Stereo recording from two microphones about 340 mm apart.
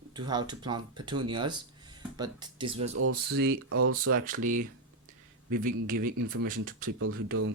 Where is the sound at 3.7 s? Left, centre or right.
Right.